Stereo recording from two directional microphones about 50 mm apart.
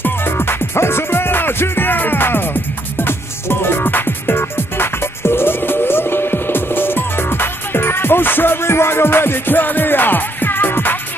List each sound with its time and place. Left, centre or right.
0.0 s music: left